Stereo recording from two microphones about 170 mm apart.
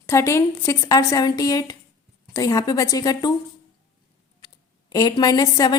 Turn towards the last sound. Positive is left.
turn(degrees=20)  # may be behind; listen again after turning